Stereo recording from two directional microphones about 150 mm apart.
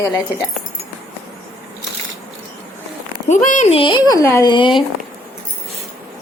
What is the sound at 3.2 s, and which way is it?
Speech, 55° left (ahead or behind).